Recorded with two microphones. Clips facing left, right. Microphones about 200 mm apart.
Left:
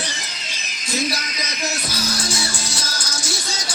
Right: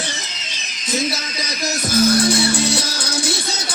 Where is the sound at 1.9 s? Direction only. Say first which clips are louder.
Right 11 dB; 60° right (ahead or behind).